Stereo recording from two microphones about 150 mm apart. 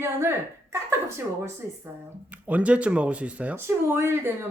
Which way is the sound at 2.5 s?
10° right (ahead or behind).